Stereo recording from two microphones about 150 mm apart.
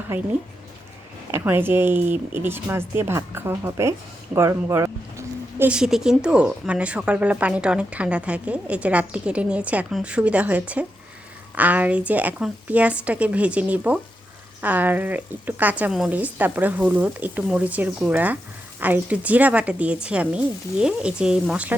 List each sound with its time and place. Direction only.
0.1 s speech: 15° right (ahead or behind)
1.3 s speech: 15° right (ahead or behind)